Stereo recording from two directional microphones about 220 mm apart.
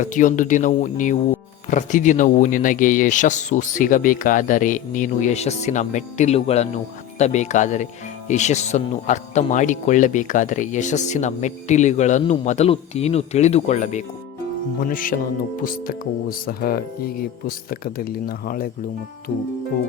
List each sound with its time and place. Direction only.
0.0 s speech: 35° left (ahead or behind)